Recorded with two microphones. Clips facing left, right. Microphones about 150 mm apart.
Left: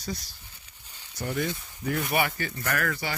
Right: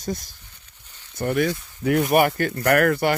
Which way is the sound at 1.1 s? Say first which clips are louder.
Right 8 dB; 70° right (ahead or behind).